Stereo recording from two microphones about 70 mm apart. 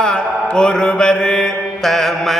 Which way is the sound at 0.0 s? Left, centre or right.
Centre.